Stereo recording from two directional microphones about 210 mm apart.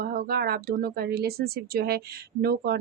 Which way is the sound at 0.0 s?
45° right (ahead or behind).